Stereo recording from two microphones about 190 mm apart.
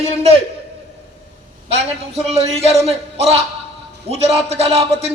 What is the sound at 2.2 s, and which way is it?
A man's voice, 35° right (ahead or behind).